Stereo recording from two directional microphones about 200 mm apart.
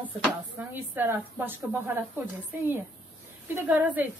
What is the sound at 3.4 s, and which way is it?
Speech, 10° right (ahead or behind).